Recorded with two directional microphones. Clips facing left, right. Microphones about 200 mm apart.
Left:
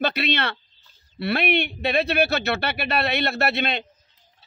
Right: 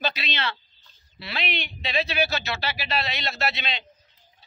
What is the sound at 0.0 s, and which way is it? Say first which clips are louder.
A man's voice: left 6 dB; 60° left (ahead or behind).